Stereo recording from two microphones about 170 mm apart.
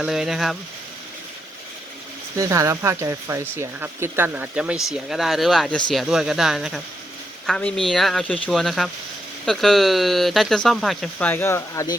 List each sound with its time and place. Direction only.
0.0 s speech: centre (ahead or behind)
2.4 s speech: 20° right (ahead or behind); by 11.9 s 15° left (ahead or behind)